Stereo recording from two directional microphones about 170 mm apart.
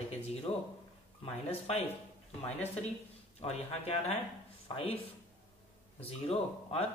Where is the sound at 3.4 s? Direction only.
35° left (ahead or behind).